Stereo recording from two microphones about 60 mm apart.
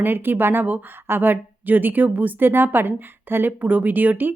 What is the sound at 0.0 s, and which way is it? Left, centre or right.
A woman's voice, right.